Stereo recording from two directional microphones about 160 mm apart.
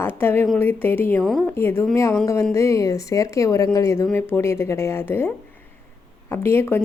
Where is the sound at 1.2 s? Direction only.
Centre (ahead or behind).